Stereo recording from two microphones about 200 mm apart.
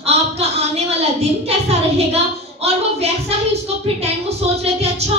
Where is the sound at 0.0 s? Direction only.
30° right (ahead or behind).